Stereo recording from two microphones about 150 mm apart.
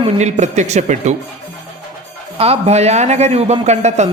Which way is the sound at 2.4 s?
45° right (ahead or behind).